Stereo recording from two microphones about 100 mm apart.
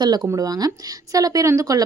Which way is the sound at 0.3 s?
35° right (ahead or behind).